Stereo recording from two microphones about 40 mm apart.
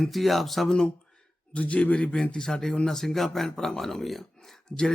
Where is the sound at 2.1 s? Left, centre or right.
Left; by 4.2 s centre.